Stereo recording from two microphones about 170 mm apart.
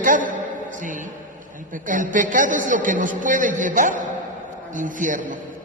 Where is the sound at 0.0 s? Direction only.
50° right (ahead or behind).